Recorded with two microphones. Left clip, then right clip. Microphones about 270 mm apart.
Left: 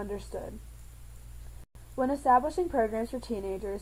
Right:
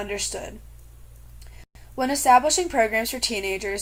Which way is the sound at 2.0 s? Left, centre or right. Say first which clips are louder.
Right 7 dB; right.